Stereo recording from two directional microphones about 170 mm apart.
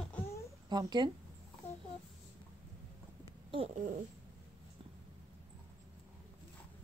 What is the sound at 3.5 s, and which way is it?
Babbling, 35° right (ahead or behind).